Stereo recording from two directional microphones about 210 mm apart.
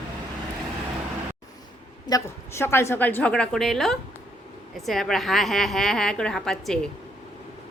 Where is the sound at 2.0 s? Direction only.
15° left (ahead or behind).